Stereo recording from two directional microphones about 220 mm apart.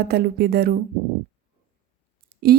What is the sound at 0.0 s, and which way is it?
Speech, 45° right (ahead or behind).